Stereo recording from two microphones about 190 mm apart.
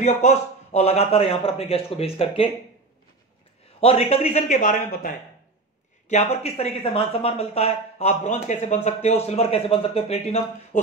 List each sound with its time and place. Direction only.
0.0 s speech: 35° left (ahead or behind)
3.8 s speech: 30° left (ahead or behind)